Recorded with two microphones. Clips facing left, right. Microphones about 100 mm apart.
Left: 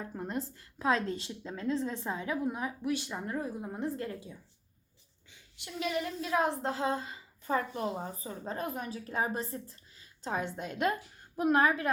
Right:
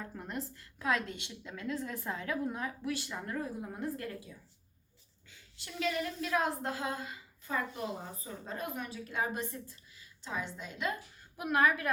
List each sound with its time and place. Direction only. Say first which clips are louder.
0.0 s a woman's voice: left 4 dB; 25° left (ahead or behind); by 10.9 s 55° left (ahead or behind)
11.3 s a woman's voice: left 3 dB; 30° left (ahead or behind)